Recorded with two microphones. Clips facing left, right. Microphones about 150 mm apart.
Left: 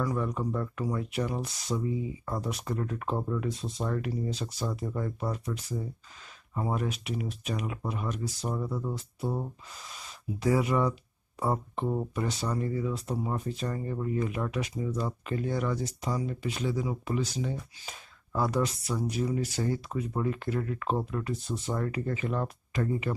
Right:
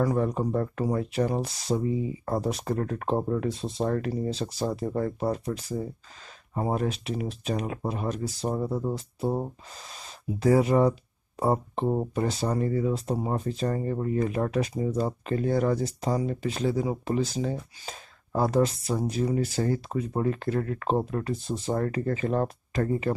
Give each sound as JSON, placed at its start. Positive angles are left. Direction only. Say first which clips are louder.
{"t": 0.0, "sound": "speech", "louder": "right 5 dB", "side_deg": -40}
{"t": 3.1, "sound": "speech", "louder": "right 5 dB", "side_deg": -35}
{"t": 12.9, "sound": "speech", "louder": "right 4 dB", "side_deg": -30}